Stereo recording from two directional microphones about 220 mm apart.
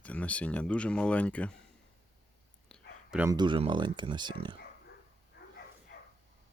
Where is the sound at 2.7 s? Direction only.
5° right (ahead or behind).